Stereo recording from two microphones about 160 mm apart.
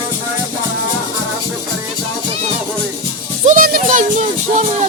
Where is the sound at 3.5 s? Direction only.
60° right (ahead or behind).